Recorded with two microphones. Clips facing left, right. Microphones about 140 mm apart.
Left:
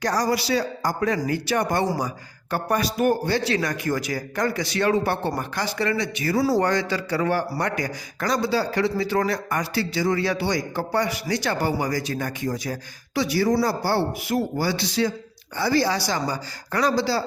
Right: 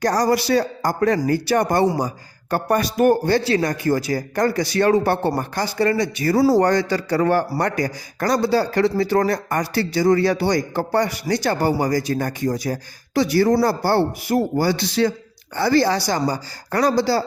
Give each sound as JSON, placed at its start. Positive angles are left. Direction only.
{"t": 0.0, "sound": "a man's voice", "side_deg": -45}
{"t": 2.6, "sound": "a man's voice", "side_deg": -45}
{"t": 3.4, "sound": "a man's voice", "side_deg": -35}
{"t": 14.3, "sound": "a man's voice", "side_deg": -40}